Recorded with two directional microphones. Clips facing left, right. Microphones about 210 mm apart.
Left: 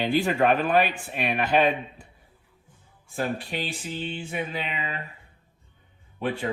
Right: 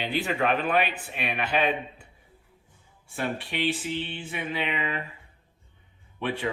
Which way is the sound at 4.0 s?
45° left (ahead or behind).